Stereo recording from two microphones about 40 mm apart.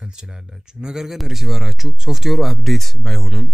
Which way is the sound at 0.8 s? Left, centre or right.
Centre.